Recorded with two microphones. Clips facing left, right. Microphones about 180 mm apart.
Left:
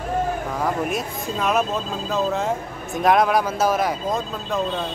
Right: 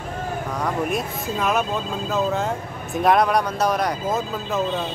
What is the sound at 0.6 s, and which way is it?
Speech, centre (ahead or behind).